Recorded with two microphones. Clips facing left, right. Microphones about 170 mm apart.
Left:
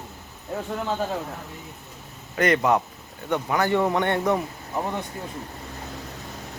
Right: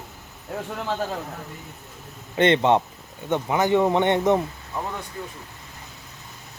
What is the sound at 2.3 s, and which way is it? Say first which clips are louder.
Speech: right 2 dB; 25° right (ahead or behind).